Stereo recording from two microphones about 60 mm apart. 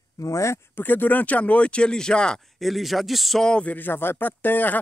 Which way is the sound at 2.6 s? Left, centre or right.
Centre.